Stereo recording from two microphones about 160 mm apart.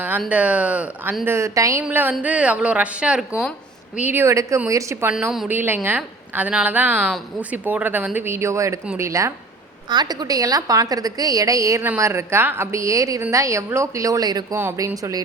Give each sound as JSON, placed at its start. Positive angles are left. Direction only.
{"t": 0.3, "sound": "speech", "side_deg": -10}
{"t": 5.1, "sound": "a woman's voice", "side_deg": -5}